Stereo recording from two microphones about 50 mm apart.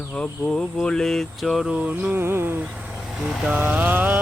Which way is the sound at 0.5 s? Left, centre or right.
Centre.